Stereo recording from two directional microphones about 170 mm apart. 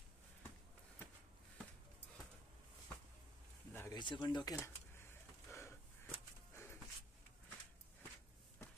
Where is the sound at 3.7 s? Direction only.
20° left (ahead or behind).